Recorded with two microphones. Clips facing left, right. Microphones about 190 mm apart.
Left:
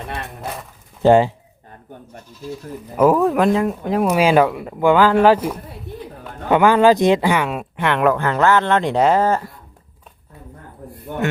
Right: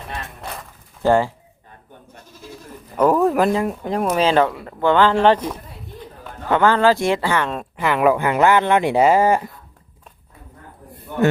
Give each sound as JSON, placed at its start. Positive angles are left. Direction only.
{"t": 1.0, "sound": "speech", "side_deg": 20}
{"t": 2.9, "sound": "speech", "side_deg": 5}